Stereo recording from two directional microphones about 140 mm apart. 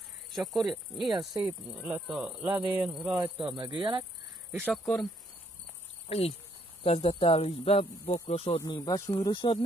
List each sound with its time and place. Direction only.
0.3 s cricket: centre (ahead or behind)
1.4 s speech: 10° right (ahead or behind)
3.4 s cricket: 35° right (ahead or behind)
4.5 s speech: 10° right (ahead or behind)
6.0 s speech: 45° left (ahead or behind)
8.6 s speech: 30° left (ahead or behind)
9.1 s speech: 35° left (ahead or behind)